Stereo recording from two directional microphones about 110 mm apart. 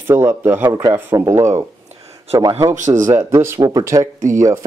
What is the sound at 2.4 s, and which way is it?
Speech, 35° right (ahead or behind).